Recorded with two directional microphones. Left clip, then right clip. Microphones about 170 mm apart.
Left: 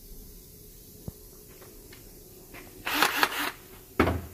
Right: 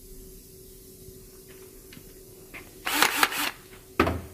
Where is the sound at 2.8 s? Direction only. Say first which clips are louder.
Right 2 dB; 15° right (ahead or behind).